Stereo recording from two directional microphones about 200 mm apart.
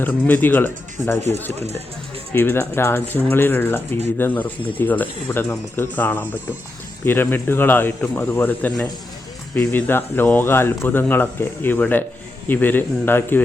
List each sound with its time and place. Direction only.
0.0 s speech: 10° left (ahead or behind)
1.5 s speech: 35° right (ahead or behind)
2.3 s speech: 10° left (ahead or behind)